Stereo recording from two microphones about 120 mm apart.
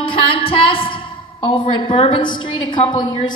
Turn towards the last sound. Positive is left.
turn(degrees=40)  # may be behind; listen again after turning